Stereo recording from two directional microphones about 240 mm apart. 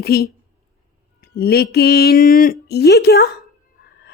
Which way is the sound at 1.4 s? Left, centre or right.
Left.